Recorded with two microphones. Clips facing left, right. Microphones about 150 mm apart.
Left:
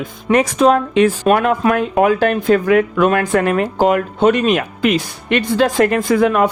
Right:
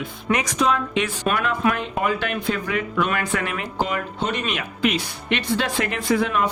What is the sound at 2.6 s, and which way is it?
Speech, 55° left (ahead or behind).